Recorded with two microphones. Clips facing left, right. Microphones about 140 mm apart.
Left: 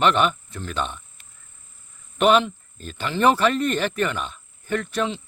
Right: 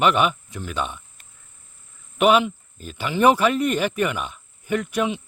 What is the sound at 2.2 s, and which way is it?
Speech, 10° right (ahead or behind).